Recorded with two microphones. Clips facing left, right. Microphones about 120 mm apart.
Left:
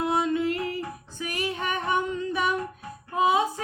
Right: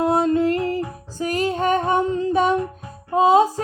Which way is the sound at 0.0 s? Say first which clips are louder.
Right 7 dB; 40° right (ahead or behind).